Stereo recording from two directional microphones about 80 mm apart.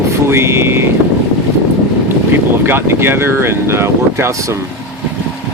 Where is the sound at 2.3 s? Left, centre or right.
Right.